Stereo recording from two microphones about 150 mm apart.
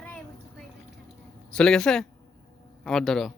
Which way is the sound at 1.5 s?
5° left (ahead or behind).